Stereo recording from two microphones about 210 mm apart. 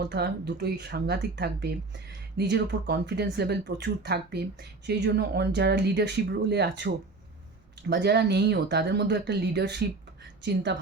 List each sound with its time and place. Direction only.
0.0 s a woman's voice: 50° right (ahead or behind)